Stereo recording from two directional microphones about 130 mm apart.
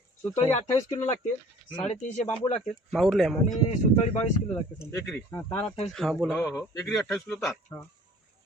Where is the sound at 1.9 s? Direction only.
60° left (ahead or behind).